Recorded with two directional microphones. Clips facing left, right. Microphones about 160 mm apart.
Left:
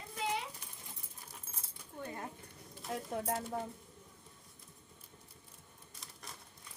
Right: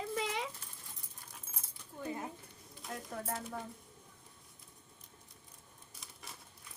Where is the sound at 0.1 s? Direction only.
90° right.